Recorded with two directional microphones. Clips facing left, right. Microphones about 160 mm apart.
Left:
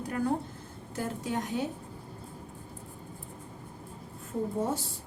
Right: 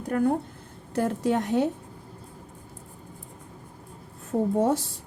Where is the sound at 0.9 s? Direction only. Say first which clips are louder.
Right 9 dB; 70° right (ahead or behind).